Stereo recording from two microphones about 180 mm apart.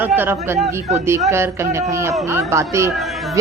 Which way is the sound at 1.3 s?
15° right (ahead or behind).